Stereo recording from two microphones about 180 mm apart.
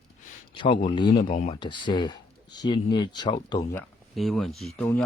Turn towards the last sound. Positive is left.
turn(degrees=10)  # may be behind; listen again after turning